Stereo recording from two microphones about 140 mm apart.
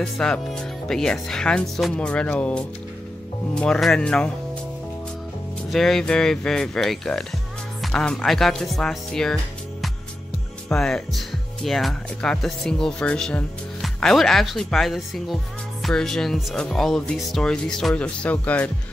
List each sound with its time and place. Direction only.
0.0 s speech: 5° left (ahead or behind)
5.7 s speech: centre (ahead or behind)